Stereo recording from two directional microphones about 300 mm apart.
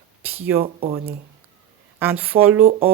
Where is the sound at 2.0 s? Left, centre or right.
Centre.